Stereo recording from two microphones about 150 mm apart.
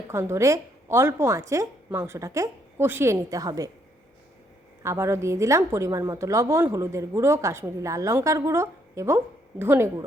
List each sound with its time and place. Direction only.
0.1 s a woman's voice: 20° right (ahead or behind)
4.8 s a woman's voice: 20° right (ahead or behind)